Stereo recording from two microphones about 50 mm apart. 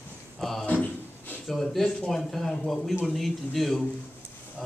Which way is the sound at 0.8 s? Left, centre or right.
Left.